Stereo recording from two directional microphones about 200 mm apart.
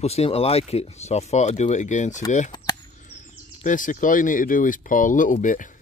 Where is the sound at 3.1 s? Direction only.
40° left (ahead or behind).